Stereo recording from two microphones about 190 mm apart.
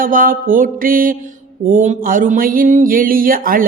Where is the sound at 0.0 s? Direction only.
45° right (ahead or behind).